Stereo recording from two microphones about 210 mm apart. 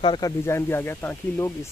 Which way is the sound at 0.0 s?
25° left (ahead or behind).